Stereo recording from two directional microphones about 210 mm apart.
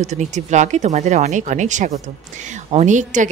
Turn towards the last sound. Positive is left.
turn(degrees=-35)  # may be behind; listen again after turning